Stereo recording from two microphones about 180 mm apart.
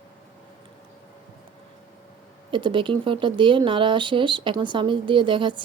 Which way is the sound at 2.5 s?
25° right (ahead or behind).